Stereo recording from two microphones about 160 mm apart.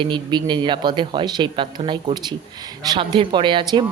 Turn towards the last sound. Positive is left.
turn(degrees=-30)  # may be behind; listen again after turning